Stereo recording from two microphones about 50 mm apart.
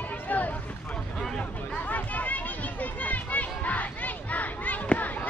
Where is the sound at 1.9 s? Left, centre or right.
Left.